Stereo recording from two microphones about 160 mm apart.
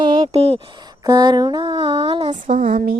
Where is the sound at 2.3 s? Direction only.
55° right (ahead or behind).